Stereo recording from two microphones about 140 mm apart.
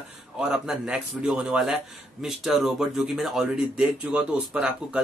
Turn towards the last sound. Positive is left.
turn(degrees=-5)  # may be behind; listen again after turning